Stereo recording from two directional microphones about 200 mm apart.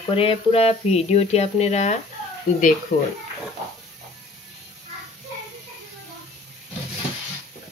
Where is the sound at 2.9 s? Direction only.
45° left (ahead or behind).